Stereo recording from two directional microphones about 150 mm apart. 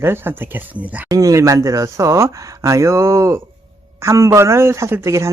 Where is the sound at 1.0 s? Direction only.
20° right (ahead or behind).